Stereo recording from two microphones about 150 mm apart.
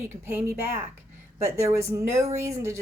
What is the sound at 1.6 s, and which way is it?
Speech, 20° right (ahead or behind).